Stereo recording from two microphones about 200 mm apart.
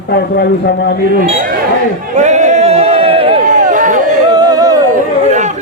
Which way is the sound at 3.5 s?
40° right (ahead or behind).